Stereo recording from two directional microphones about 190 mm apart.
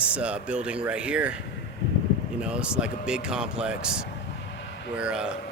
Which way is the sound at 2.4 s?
5° right (ahead or behind).